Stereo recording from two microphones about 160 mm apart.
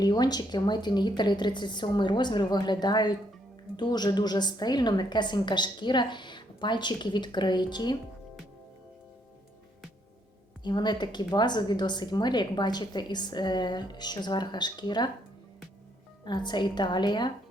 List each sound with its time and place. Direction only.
0.0 s a woman's voice: 25° left (ahead or behind)
10.6 s a woman's voice: 25° left (ahead or behind)
16.2 s a woman's voice: 30° left (ahead or behind)